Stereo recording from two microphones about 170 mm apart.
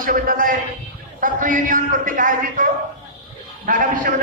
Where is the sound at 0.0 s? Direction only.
55° right (ahead or behind).